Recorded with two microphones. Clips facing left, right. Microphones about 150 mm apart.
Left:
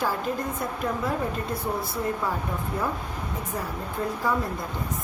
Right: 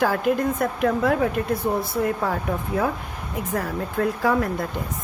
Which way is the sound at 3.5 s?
75° right (ahead or behind).